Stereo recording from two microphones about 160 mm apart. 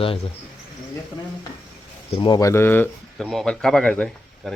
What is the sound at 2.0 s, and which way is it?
Speech, 35° left (ahead or behind).